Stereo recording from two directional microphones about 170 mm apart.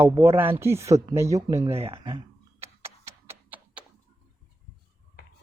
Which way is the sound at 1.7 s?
35° right (ahead or behind).